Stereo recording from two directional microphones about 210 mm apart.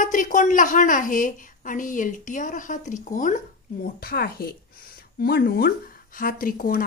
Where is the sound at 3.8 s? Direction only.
45° left (ahead or behind).